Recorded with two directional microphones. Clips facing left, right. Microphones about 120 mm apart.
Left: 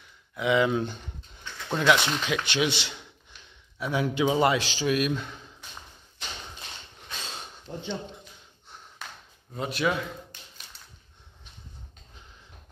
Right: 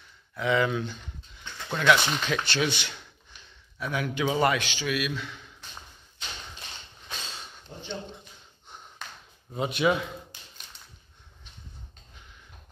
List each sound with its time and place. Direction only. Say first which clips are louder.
0.4 s speech: left 2 dB; 20° left (ahead or behind)
2.0 s a man's voice: even; 10° left (ahead or behind); by 5.4 s 45° left (ahead or behind)
7.7 s speech: left 7 dB; 60° left (ahead or behind)
8.6 s a sound: right 2 dB; centre (ahead or behind)
9.5 s a man's voice: right 3 dB; centre (ahead or behind)